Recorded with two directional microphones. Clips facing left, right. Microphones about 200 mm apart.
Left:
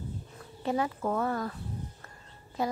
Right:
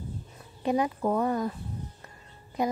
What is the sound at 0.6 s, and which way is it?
Speech, 15° right (ahead or behind).